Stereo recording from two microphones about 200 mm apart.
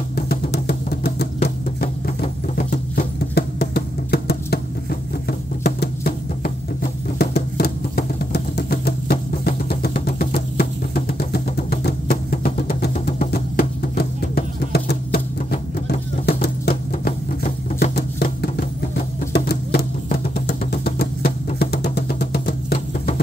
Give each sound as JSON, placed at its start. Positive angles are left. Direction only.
{"t": 0.1, "sound": "music", "side_deg": 55}
{"t": 7.2, "sound": "a sound", "side_deg": 55}
{"t": 11.1, "sound": "music", "side_deg": 50}